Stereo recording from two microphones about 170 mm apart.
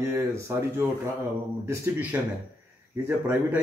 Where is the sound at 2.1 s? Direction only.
10° right (ahead or behind).